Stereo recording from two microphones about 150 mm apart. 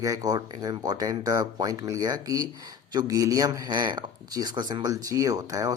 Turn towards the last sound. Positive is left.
turn(degrees=-25)  # may be behind; listen again after turning